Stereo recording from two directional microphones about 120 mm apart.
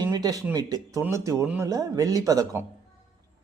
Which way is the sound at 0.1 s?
30° right (ahead or behind).